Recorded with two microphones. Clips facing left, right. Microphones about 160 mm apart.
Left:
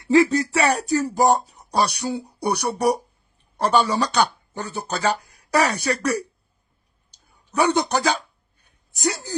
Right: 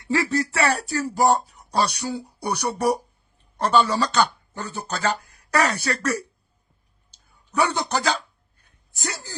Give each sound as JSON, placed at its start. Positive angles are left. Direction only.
{"t": 0.1, "sound": "speech", "side_deg": 20}
{"t": 7.1, "sound": "a sound", "side_deg": 20}
{"t": 8.9, "sound": "speech", "side_deg": 15}